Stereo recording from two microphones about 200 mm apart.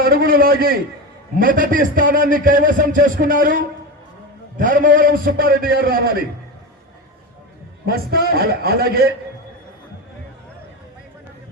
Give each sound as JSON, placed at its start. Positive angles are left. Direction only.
{"t": 0.0, "sound": "a man's voice", "side_deg": -45}
{"t": 7.9, "sound": "a man's voice", "side_deg": -50}